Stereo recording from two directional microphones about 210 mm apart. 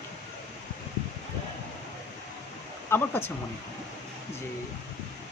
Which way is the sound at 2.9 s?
10° left (ahead or behind).